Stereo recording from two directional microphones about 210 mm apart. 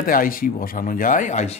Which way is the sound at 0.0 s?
40° left (ahead or behind).